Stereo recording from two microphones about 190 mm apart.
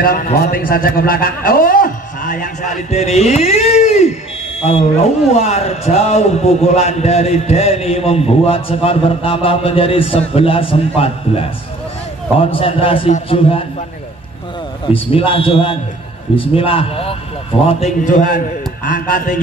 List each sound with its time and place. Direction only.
0.0 s a man's voice: 50° left (ahead or behind); by 4.1 s 35° left (ahead or behind)
5.3 s a man's voice: 35° left (ahead or behind)
14.9 s a man's voice: 30° left (ahead or behind); by 19.4 s 45° left (ahead or behind)